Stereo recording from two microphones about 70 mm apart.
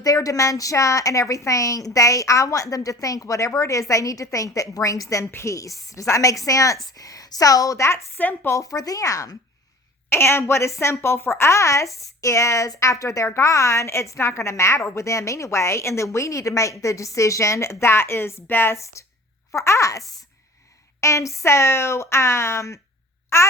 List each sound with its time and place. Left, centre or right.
0.0 s a woman's voice: left
8.6 s a woman's voice: left
10.1 s a woman's voice: left
19.5 s a woman's voice: left
21.0 s speech: left